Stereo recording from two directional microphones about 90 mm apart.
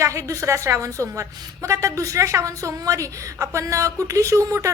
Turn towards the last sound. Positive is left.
turn(degrees=-35)  # may be behind; listen again after turning